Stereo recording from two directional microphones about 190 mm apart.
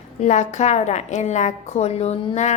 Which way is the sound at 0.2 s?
40° left (ahead or behind).